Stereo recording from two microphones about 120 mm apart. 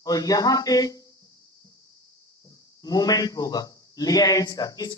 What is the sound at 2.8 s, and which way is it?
Speech, 30° left (ahead or behind).